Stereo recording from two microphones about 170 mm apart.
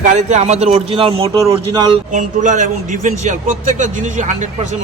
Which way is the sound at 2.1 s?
45° right (ahead or behind).